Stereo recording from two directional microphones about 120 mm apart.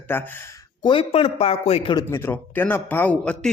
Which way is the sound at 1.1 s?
55° left (ahead or behind).